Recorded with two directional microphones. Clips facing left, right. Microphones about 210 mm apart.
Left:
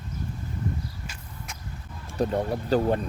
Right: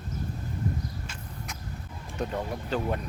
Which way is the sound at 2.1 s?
35° left (ahead or behind).